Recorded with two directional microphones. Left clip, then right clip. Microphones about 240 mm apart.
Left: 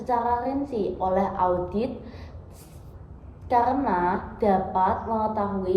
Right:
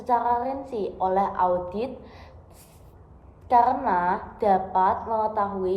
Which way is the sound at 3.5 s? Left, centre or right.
Centre.